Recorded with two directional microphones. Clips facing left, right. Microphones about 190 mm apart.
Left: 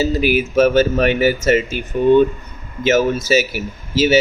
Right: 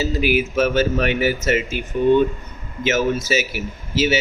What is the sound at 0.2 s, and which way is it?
A man's voice, 40° left (ahead or behind).